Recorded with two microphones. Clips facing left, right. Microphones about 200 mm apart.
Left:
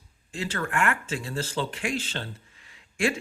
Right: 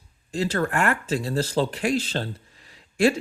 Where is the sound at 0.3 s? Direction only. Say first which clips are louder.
Right 7 dB; 40° right (ahead or behind).